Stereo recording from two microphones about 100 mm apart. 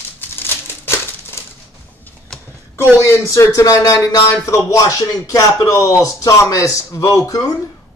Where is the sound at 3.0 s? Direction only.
30° left (ahead or behind).